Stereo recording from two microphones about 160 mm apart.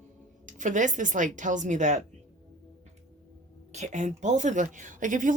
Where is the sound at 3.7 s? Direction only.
45° right (ahead or behind).